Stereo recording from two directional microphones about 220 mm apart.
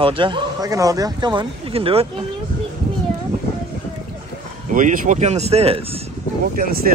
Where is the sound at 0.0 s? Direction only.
25° right (ahead or behind).